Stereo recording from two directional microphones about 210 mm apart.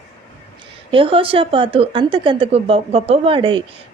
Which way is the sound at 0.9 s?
25° right (ahead or behind).